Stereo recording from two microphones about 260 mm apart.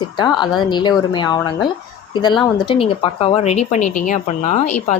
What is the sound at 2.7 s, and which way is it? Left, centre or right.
Speech, left.